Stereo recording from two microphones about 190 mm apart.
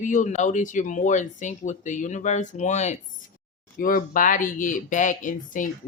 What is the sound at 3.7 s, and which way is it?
Speech, 50° left (ahead or behind).